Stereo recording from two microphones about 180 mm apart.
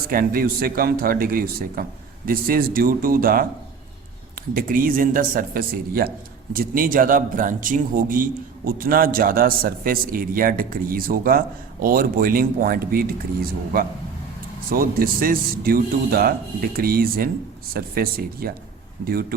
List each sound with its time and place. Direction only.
0.1 s a man's voice: 55° right (ahead or behind)
4.5 s a man's voice: 50° right (ahead or behind)